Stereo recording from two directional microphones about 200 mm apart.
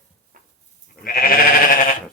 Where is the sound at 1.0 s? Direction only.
45° left (ahead or behind).